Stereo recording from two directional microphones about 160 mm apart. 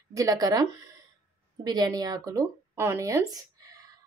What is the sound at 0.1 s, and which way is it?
Speech, 20° right (ahead or behind).